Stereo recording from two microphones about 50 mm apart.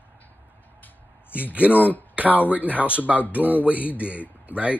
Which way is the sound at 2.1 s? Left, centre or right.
Right.